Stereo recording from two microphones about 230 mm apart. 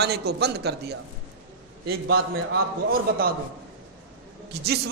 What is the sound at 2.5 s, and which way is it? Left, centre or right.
Speech, right.